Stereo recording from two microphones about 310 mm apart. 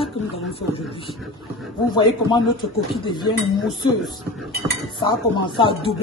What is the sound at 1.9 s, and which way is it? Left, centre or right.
Speech, centre.